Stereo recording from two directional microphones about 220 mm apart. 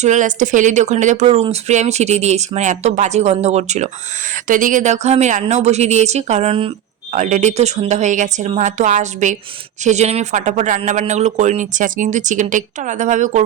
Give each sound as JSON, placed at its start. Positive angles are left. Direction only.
{"t": 0.0, "sound": "speech", "side_deg": -35}